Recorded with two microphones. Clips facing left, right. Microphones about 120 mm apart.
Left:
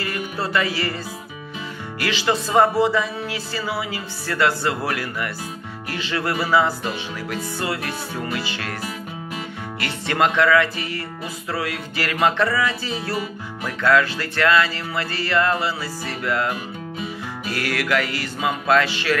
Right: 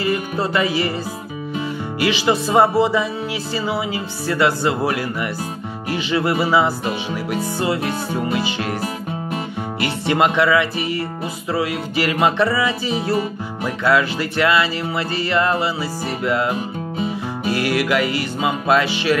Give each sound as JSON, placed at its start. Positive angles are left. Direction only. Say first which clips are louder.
{"t": 0.0, "sound": "music", "louder": "right 6 dB", "side_deg": -20}
{"t": 2.0, "sound": "music", "louder": "right 4 dB", "side_deg": -15}
{"t": 3.5, "sound": "speech", "louder": "right 5 dB", "side_deg": -20}
{"t": 5.9, "sound": "music", "louder": "right 5 dB", "side_deg": -15}
{"t": 9.8, "sound": "music", "louder": "right 3 dB", "side_deg": -15}
{"t": 16.3, "sound": "speech", "louder": "right 3 dB", "side_deg": -20}
{"t": 17.5, "sound": "music", "louder": "right 4 dB", "side_deg": -15}